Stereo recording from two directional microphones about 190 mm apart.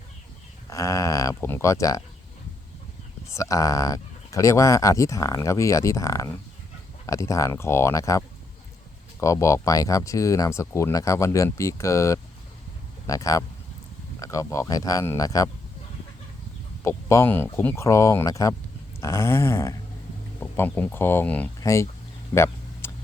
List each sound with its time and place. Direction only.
0.7 s speech: 15° left (ahead or behind)
3.2 s speech: 15° left (ahead or behind)
9.2 s speech: 15° left (ahead or behind)
16.8 s speech: 15° left (ahead or behind)
22.8 s vehicle: 10° left (ahead or behind)